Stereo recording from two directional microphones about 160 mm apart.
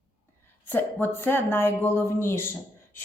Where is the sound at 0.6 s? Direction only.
10° left (ahead or behind).